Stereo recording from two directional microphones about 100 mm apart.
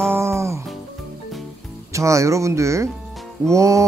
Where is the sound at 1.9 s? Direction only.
30° right (ahead or behind).